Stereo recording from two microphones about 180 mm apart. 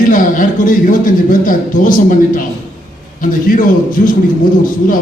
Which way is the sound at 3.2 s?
50° left (ahead or behind).